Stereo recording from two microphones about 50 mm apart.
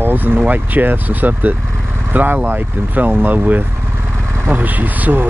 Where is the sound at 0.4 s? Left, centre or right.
Right.